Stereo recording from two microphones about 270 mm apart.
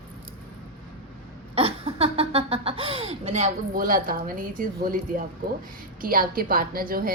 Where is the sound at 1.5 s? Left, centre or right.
Right.